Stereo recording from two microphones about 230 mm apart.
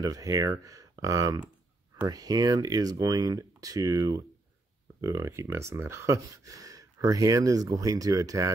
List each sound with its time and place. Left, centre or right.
0.0 s speech: centre